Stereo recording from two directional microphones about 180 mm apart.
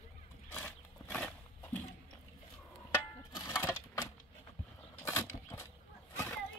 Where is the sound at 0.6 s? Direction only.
10° left (ahead or behind).